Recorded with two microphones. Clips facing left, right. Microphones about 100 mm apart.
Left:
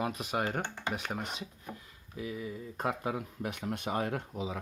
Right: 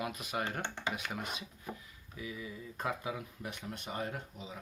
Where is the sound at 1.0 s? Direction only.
30° left (ahead or behind); by 3.9 s 55° left (ahead or behind).